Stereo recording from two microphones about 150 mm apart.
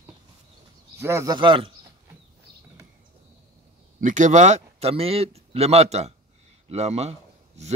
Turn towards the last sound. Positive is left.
turn(degrees=-45)  # may be behind; listen again after turning